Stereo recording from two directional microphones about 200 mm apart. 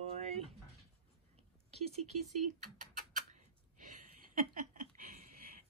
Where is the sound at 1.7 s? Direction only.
30° right (ahead or behind).